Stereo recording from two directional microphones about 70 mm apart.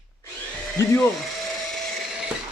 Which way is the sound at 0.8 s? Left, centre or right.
Left.